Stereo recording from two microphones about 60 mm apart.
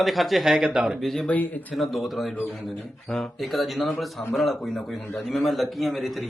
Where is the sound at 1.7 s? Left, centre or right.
Centre.